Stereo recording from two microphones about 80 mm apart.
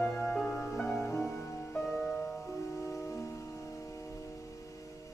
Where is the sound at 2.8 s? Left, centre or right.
Left.